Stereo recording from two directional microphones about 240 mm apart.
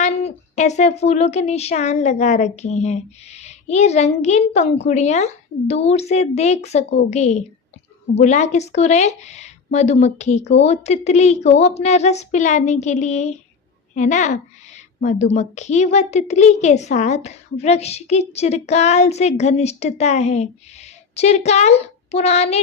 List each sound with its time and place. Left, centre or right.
0.0 s a child's voice: left